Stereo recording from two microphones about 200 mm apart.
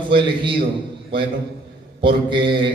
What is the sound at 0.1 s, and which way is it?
Speech, 25° right (ahead or behind).